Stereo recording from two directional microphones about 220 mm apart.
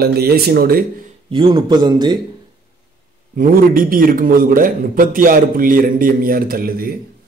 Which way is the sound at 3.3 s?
40° right (ahead or behind).